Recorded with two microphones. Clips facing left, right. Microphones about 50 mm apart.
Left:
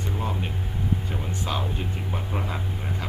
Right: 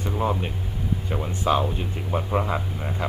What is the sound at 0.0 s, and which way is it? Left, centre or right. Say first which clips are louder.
Speech: right 5 dB; centre.